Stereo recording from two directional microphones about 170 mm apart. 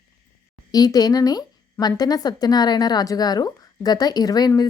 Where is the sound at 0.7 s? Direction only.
20° left (ahead or behind).